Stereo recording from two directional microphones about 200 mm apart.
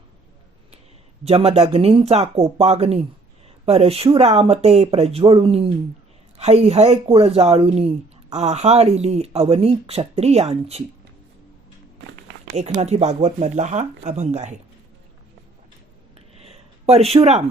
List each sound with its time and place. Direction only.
1.2 s speech: 30° right (ahead or behind)
12.5 s speech: 35° right (ahead or behind)
16.1 s a sound: 30° right (ahead or behind)